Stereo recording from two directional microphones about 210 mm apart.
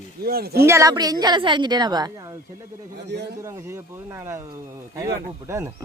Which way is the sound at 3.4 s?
15° right (ahead or behind).